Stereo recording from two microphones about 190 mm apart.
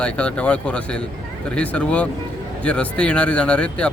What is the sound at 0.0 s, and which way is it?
Speech, 5° left (ahead or behind).